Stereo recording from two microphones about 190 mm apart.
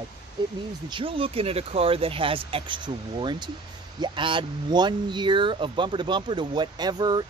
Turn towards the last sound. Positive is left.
turn(degrees=-20)  # may be behind; listen again after turning